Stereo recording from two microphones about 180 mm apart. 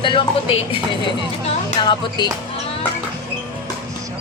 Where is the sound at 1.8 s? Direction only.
25° left (ahead or behind).